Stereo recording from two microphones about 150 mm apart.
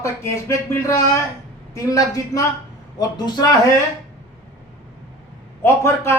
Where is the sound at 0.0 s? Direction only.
20° left (ahead or behind).